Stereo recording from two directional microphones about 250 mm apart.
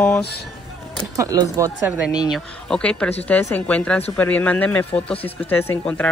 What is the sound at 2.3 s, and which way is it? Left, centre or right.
Speech, centre.